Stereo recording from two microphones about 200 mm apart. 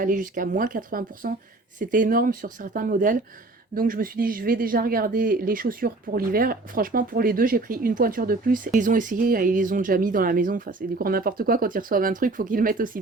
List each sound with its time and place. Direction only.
0.0 s speech: 40° right (ahead or behind)